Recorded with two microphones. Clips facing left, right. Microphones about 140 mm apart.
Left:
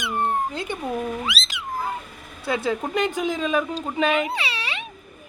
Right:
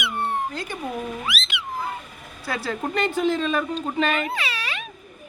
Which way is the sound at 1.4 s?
35° left (ahead or behind).